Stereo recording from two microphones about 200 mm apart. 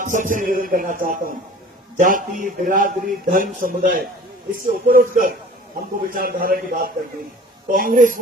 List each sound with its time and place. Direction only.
0.0 s a man's voice: 40° right (ahead or behind)